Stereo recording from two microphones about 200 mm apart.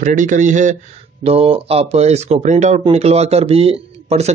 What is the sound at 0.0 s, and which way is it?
Speech, 40° right (ahead or behind).